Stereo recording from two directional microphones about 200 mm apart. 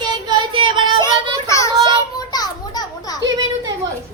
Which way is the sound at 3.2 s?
20° right (ahead or behind).